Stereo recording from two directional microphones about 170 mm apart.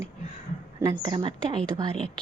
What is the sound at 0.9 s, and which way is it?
Speech, 25° right (ahead or behind).